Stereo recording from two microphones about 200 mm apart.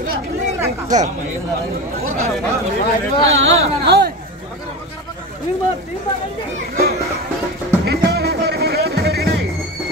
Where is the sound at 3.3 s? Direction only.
75° right (ahead or behind).